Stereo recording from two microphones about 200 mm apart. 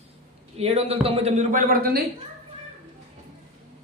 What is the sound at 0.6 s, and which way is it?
Speech, 30° right (ahead or behind).